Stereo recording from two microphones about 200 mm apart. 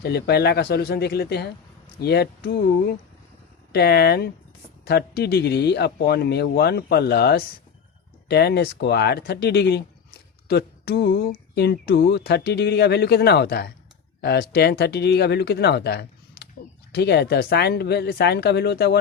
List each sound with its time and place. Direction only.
0.0 s speech: 55° left (ahead or behind)